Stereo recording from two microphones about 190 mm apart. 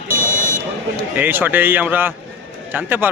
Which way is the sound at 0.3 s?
45° right (ahead or behind).